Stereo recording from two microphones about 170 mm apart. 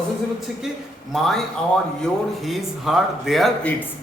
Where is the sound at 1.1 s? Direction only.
Centre (ahead or behind).